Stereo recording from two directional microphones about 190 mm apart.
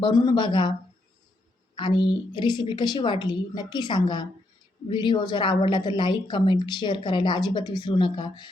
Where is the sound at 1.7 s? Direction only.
25° left (ahead or behind).